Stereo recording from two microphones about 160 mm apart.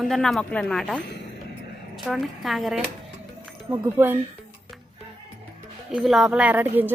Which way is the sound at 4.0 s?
15° right (ahead or behind).